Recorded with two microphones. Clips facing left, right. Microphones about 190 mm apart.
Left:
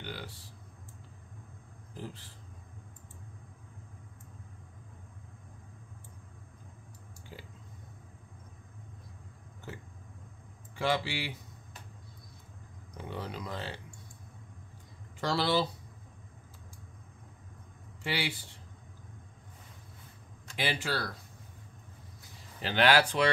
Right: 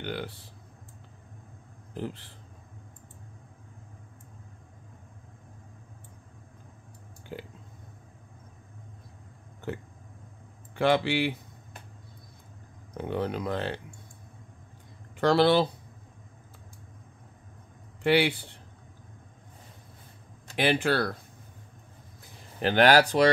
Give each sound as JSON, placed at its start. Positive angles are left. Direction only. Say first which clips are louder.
{"t": 0.0, "sound": "speech", "louder": "right 8 dB", "side_deg": -60}
{"t": 2.0, "sound": "speech", "louder": "right 8 dB", "side_deg": -65}
{"t": 7.3, "sound": "a sound", "louder": "right 10 dB", "side_deg": -60}
{"t": 10.8, "sound": "speech", "louder": "right 8 dB", "side_deg": -60}
{"t": 12.9, "sound": "speech", "louder": "right 9 dB", "side_deg": -60}
{"t": 15.1, "sound": "speech", "louder": "right 8 dB", "side_deg": -60}
{"t": 18.0, "sound": "speech", "louder": "right 12 dB", "side_deg": -60}
{"t": 20.5, "sound": "speech", "louder": "right 9 dB", "side_deg": -60}
{"t": 22.6, "sound": "speech", "louder": "right 6 dB", "side_deg": -50}